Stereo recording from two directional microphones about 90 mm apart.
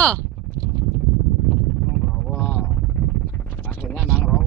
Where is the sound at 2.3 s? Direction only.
25° left (ahead or behind).